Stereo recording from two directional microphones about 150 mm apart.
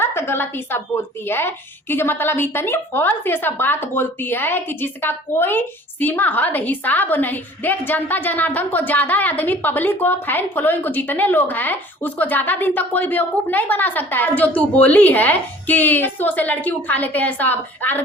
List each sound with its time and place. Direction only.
0.0 s a woman's voice: 15° left (ahead or behind)